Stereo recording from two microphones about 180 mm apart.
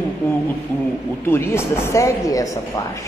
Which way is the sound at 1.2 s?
15° left (ahead or behind).